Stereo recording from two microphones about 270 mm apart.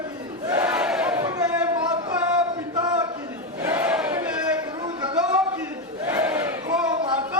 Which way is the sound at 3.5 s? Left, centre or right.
Centre.